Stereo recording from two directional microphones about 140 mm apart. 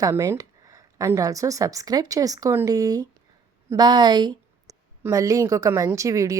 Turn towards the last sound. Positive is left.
turn(degrees=-20)  # may be behind; listen again after turning